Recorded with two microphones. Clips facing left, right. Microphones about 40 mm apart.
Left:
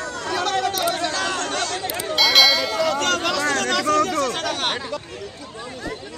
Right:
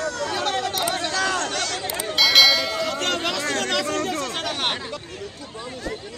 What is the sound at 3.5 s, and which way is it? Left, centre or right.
Chatter, right.